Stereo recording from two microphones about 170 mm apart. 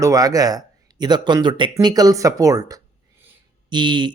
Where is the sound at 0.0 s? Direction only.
20° right (ahead or behind).